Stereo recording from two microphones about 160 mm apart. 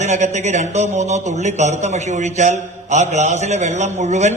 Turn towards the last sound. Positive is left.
turn(degrees=-45)  # may be behind; listen again after turning